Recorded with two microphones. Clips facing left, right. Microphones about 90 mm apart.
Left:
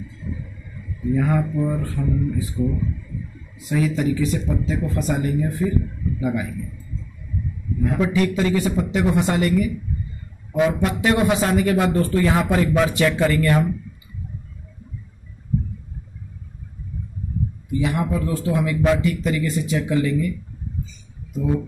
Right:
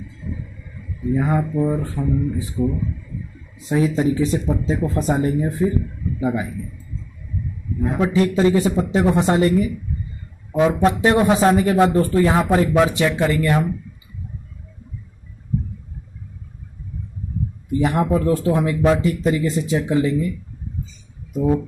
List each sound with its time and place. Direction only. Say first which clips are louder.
1.1 s speech: right 1 dB; 20° right (ahead or behind)
3.6 s speech: right 3 dB; 30° right (ahead or behind)
8.0 s speech: right 4 dB; 30° right (ahead or behind)
17.6 s speech: right 4 dB; 45° right (ahead or behind); by 20.3 s 25° right (ahead or behind)
21.3 s speech: right 4 dB; 50° right (ahead or behind)